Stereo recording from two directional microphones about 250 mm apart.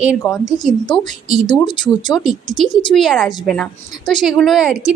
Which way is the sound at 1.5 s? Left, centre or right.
Centre.